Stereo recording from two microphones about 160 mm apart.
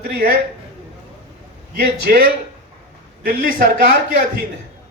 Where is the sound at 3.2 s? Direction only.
60° right (ahead or behind).